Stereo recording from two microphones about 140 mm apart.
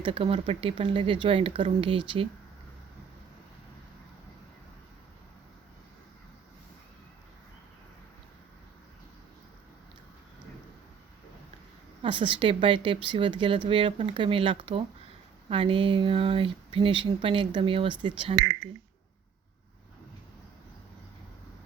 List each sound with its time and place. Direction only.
0.0 s speech: 40° right (ahead or behind)
12.0 s speech: 35° right (ahead or behind)